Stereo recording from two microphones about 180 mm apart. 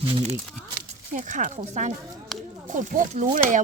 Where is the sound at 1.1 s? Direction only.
45° right (ahead or behind).